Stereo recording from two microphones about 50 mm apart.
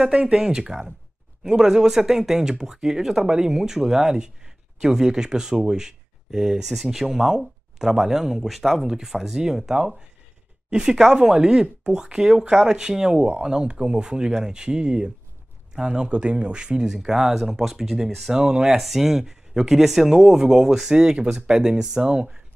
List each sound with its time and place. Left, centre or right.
0.1 s speech: right